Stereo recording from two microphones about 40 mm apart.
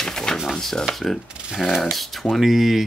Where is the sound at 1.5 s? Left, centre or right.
Centre.